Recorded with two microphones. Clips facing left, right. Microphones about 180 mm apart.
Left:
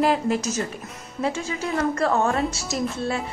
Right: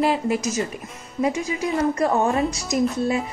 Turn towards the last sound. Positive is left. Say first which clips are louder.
# right 5 dB
turn(degrees=-15)  # may be behind; listen again after turning